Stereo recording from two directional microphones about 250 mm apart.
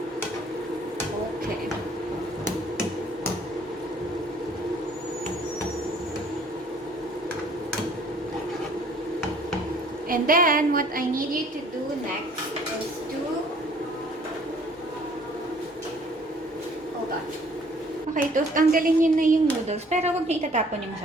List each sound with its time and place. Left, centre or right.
10.1 s speech: right
18.1 s speech: right